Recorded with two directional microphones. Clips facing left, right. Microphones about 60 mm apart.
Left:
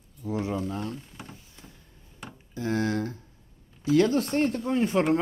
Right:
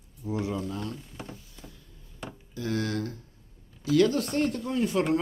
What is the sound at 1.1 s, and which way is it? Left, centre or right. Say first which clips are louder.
Speech: right 3 dB; centre.